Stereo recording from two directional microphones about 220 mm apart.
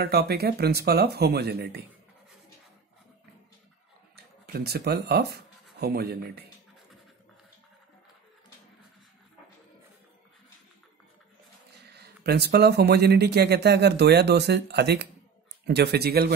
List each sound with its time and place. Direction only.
0.0 s speech: 45° right (ahead or behind)
4.5 s speech: 45° right (ahead or behind)
11.9 s speech: 50° right (ahead or behind)